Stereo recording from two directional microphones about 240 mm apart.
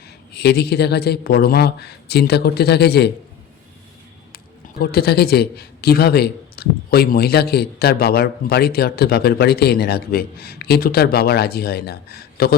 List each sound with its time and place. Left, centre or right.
0.3 s speech: left
4.8 s a man's voice: left